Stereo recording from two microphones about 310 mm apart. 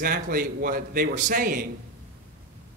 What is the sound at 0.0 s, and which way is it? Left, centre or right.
Speech, right.